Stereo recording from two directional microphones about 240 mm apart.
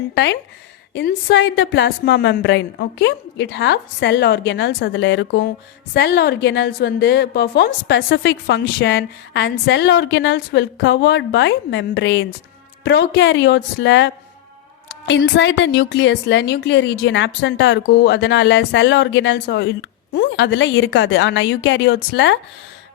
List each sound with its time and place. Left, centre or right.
0.1 s a woman's voice: left